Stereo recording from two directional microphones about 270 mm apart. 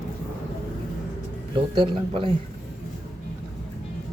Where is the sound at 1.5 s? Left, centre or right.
Centre.